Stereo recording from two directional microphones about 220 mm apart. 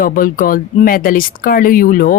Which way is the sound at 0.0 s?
40° left (ahead or behind).